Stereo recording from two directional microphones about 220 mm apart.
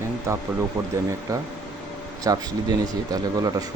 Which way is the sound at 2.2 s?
15° right (ahead or behind).